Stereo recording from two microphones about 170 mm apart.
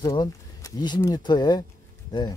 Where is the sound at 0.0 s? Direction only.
25° left (ahead or behind).